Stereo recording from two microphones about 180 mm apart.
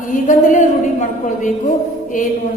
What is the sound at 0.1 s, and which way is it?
A woman's voice, 45° left (ahead or behind).